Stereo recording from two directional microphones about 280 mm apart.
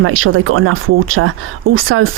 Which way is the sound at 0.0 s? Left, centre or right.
Right.